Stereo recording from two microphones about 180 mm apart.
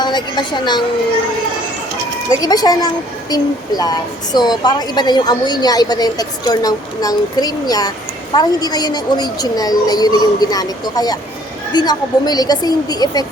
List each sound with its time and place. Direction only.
0.0 s a woman's voice: 25° left (ahead or behind)
2.4 s a woman's voice: 20° left (ahead or behind)